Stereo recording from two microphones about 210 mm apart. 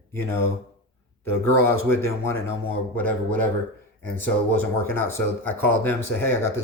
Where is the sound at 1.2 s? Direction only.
10° left (ahead or behind).